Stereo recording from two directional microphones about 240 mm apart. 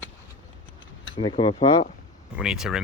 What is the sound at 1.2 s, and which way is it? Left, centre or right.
Speech, left.